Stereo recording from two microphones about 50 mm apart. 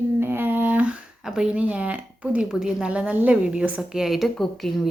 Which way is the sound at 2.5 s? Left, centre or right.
Centre.